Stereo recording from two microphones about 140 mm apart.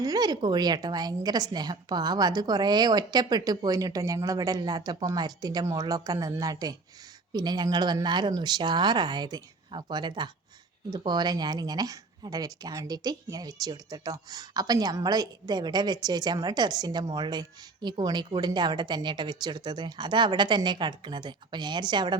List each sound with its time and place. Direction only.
0.0 s a woman's voice: 25° right (ahead or behind)